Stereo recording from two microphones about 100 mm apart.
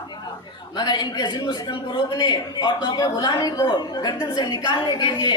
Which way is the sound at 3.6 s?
50° left (ahead or behind).